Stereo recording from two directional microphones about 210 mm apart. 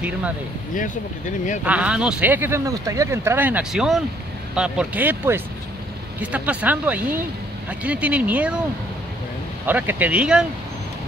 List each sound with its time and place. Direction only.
0.7 s speech: 35° left (ahead or behind)
1.6 s speech: 5° right (ahead or behind)
9.7 s speech: 10° right (ahead or behind)